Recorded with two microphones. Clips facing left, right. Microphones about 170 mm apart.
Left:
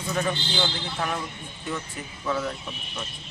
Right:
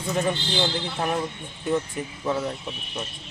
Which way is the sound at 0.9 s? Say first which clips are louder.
Right 3 dB; 25° right (ahead or behind).